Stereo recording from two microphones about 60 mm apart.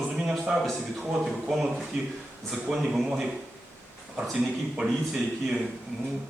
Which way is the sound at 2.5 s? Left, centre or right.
Centre.